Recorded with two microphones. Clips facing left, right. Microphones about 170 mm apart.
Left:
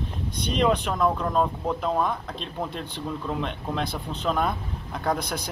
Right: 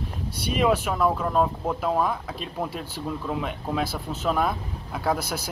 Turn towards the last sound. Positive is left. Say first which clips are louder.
# right 1 dB
turn(degrees=-5)  # may be behind; listen again after turning